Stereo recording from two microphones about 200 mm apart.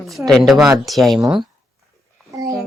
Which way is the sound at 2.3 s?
15° right (ahead or behind).